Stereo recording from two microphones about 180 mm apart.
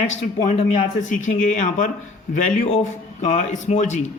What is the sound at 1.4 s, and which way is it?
A man's voice, 45° left (ahead or behind).